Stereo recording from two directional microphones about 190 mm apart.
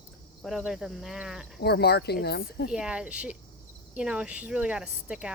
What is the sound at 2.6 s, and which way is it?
Speech, 5° right (ahead or behind).